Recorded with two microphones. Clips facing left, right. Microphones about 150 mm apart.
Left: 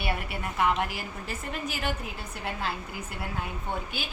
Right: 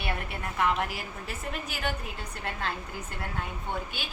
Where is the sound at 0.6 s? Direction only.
Centre (ahead or behind).